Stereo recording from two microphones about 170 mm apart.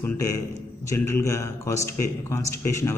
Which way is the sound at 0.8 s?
15° left (ahead or behind).